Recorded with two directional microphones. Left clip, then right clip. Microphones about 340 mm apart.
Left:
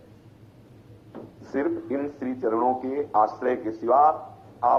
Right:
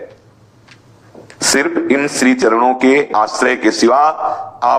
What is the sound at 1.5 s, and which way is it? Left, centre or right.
A man's voice, right.